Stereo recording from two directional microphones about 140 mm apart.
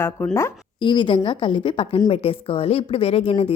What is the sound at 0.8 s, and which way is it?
A woman's voice, 35° left (ahead or behind).